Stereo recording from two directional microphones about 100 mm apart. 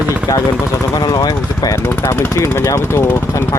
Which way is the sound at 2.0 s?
25° left (ahead or behind).